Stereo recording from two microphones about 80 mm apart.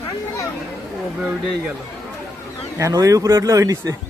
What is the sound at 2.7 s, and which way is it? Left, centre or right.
Speech, right.